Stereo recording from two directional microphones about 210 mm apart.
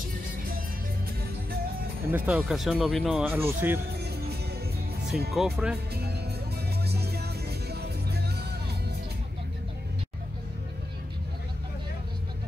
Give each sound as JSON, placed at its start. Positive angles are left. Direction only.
{"t": 2.0, "sound": "speech", "side_deg": -5}
{"t": 5.3, "sound": "speech", "side_deg": -5}
{"t": 6.8, "sound": "music", "side_deg": -50}